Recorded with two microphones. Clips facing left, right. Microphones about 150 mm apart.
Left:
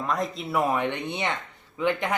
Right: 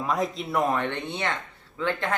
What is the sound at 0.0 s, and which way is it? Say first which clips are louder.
Speech: right 1 dB; centre (ahead or behind).